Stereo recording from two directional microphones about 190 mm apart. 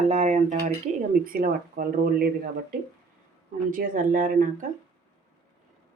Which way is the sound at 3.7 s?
45° right (ahead or behind).